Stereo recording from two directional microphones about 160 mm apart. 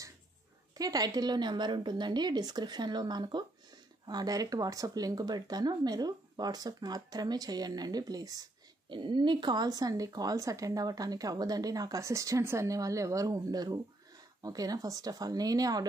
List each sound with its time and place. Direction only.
0.7 s speech: 25° right (ahead or behind)